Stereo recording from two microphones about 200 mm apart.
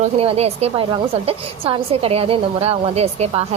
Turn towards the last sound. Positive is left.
turn(degrees=-30)  # may be behind; listen again after turning